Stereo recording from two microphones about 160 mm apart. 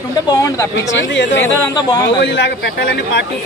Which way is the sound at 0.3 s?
20° left (ahead or behind).